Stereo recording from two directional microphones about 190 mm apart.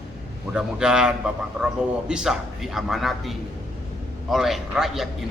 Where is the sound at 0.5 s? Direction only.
5° right (ahead or behind).